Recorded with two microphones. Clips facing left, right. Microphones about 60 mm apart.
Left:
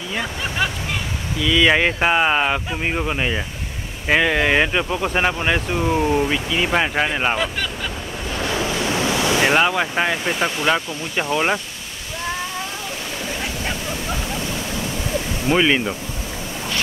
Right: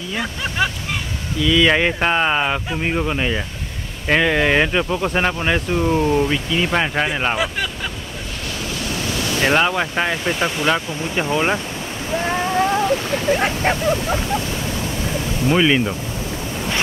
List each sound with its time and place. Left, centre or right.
0.1 s speech: centre
7.3 s speech: centre
8.5 s waves: left
9.5 s speech: centre
13.3 s a sound: right
13.8 s a sound: right
15.4 s speech: centre